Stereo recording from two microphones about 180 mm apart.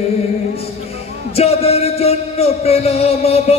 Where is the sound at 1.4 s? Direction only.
35° left (ahead or behind).